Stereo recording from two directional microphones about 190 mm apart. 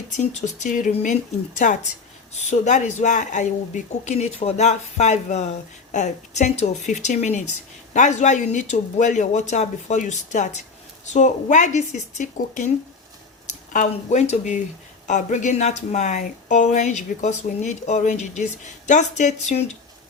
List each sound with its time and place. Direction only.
0.1 s a woman's voice: 40° left (ahead or behind)
13.7 s speech: 40° left (ahead or behind)